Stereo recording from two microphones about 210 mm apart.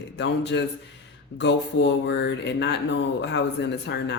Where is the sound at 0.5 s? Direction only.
55° left (ahead or behind).